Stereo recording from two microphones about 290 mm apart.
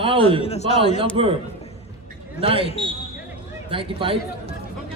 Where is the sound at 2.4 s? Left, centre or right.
Centre.